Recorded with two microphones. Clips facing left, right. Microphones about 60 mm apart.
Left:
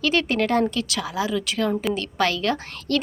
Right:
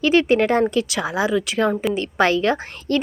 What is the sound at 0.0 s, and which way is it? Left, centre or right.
A woman's voice, right.